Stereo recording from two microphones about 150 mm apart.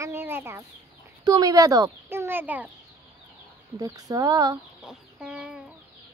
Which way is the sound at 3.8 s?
25° right (ahead or behind).